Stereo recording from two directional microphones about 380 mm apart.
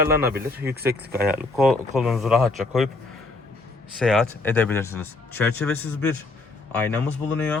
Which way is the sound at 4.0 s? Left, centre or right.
Centre.